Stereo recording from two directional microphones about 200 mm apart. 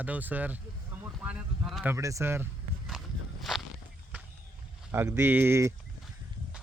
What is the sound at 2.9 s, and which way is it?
Walk, centre (ahead or behind).